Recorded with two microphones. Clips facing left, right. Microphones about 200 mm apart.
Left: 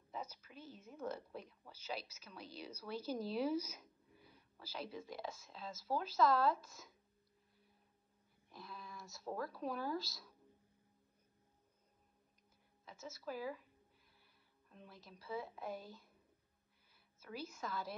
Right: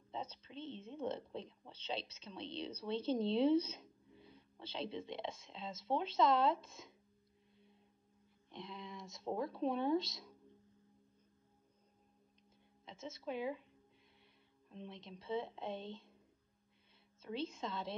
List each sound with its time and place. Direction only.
0.1 s a woman's voice: 30° right (ahead or behind)
8.5 s a woman's voice: 25° right (ahead or behind)
12.8 s a woman's voice: 25° right (ahead or behind)
14.7 s a woman's voice: 25° right (ahead or behind)
17.2 s a woman's voice: 30° right (ahead or behind)